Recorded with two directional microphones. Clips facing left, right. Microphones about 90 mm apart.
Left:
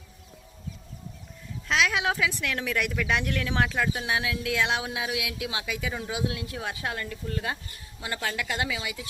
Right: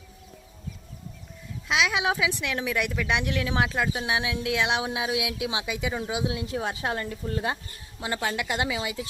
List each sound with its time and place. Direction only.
1.6 s speech: 10° right (ahead or behind); by 9.0 s 25° right (ahead or behind)